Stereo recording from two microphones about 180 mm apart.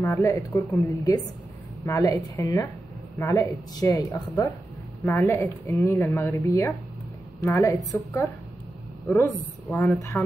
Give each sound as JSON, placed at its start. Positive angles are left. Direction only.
{"t": 0.0, "sound": "a woman's voice", "side_deg": 15}